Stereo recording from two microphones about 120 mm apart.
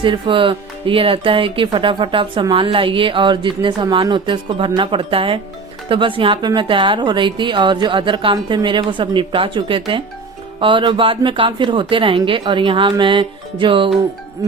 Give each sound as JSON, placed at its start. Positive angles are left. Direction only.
{"t": 0.0, "sound": "speech", "side_deg": -45}